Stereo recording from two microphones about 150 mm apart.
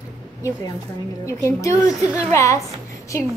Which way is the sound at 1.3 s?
20° left (ahead or behind).